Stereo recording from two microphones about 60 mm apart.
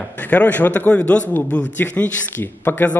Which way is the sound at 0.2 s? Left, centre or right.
Left.